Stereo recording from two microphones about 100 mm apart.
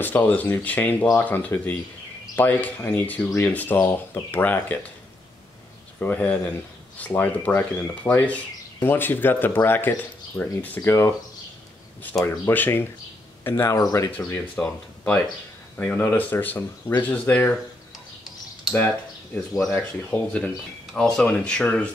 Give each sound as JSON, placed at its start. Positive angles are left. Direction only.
{"t": 0.0, "sound": "speech", "side_deg": 20}
{"t": 5.9, "sound": "speech", "side_deg": 15}
{"t": 10.9, "sound": "speech", "side_deg": 30}
{"t": 12.1, "sound": "speech", "side_deg": 5}
{"t": 12.4, "sound": "speech", "side_deg": 20}
{"t": 13.7, "sound": "speech", "side_deg": 35}
{"t": 14.5, "sound": "speech", "side_deg": 15}
{"t": 19.3, "sound": "speech", "side_deg": 0}
{"t": 19.7, "sound": "speech", "side_deg": 15}